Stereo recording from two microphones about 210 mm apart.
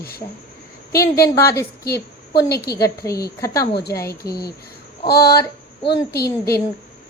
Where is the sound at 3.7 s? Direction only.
50° left (ahead or behind).